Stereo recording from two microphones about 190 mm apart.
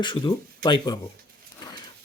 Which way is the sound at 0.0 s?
25° left (ahead or behind).